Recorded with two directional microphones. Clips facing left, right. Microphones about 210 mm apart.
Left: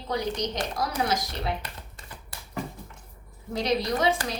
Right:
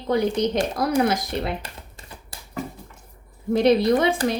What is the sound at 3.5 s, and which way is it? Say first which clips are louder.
Speech: right 9 dB; 55° right (ahead or behind).